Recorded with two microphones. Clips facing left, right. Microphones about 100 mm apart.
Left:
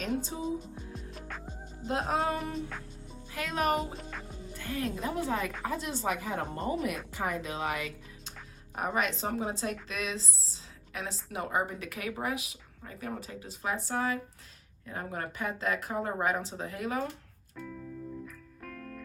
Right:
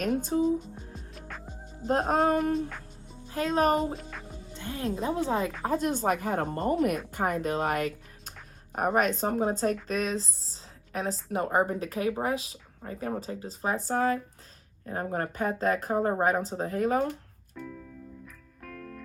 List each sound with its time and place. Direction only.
0.0 s speech: 50° right (ahead or behind)
1.9 s speech: 40° right (ahead or behind)
3.3 s a woman's voice: 35° right (ahead or behind)
5.6 s a woman's voice: 45° right (ahead or behind)
17.5 s music: centre (ahead or behind)